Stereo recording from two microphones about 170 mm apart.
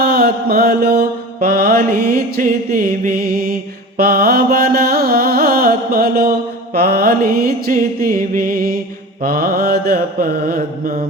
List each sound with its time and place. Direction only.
0.0 s mantra: 65° right (ahead or behind)